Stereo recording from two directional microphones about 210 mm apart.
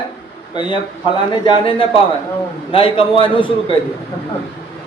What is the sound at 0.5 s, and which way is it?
Speech, 20° left (ahead or behind).